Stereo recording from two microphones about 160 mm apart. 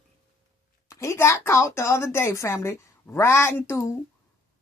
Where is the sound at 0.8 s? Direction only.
20° left (ahead or behind).